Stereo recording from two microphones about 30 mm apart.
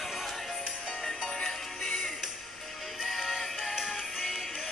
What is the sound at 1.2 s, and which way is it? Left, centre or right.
Music, left.